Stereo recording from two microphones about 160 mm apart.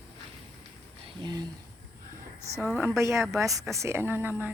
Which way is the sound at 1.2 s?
25° right (ahead or behind).